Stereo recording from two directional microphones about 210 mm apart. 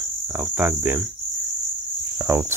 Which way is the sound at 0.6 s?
10° right (ahead or behind).